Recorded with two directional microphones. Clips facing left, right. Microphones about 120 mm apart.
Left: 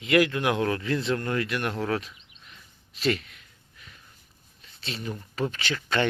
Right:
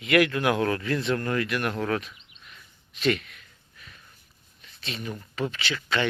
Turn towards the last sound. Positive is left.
turn(degrees=45)  # may be behind; listen again after turning